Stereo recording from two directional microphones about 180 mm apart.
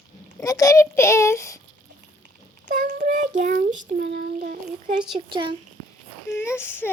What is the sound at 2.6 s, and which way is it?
Child singing, 45° right (ahead or behind).